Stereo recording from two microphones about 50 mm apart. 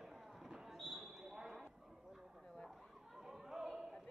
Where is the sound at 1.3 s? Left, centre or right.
Centre.